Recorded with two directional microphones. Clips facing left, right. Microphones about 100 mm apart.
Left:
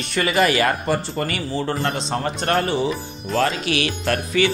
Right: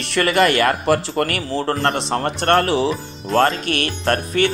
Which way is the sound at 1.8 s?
60° right (ahead or behind).